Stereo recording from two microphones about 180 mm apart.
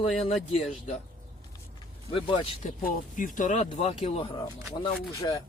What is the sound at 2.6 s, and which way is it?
Speech, 50° left (ahead or behind).